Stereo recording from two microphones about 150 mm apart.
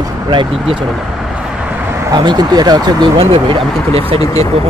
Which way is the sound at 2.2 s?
25° right (ahead or behind).